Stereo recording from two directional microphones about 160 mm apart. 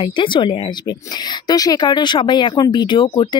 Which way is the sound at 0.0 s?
30° left (ahead or behind).